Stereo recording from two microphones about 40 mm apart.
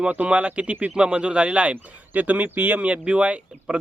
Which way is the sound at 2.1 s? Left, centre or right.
Right.